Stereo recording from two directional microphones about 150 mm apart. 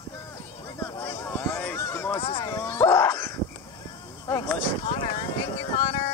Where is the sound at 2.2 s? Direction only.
30° left (ahead or behind).